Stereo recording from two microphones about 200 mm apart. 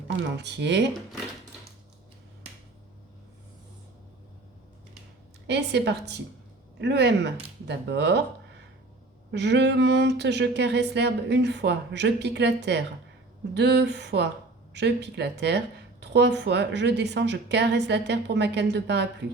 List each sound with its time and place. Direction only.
0.4 s speech: 60° right (ahead or behind)
5.5 s speech: 60° right (ahead or behind)
9.3 s speech: 60° right (ahead or behind)